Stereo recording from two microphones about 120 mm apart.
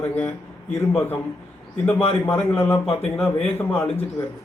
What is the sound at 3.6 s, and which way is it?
Speech, 20° left (ahead or behind).